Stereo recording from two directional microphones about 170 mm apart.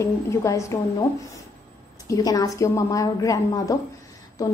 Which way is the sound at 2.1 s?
20° left (ahead or behind).